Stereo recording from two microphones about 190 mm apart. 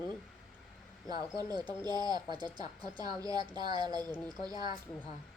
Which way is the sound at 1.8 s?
20° right (ahead or behind).